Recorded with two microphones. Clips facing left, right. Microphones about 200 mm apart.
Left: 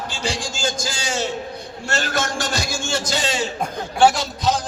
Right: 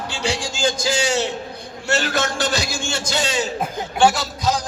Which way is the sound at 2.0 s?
60° right (ahead or behind).